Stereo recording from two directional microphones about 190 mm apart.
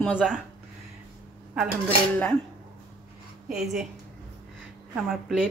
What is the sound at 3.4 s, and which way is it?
Speech, 5° right (ahead or behind).